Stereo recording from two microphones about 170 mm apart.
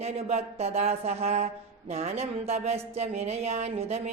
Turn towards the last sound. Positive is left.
turn(degrees=-40)  # may be behind; listen again after turning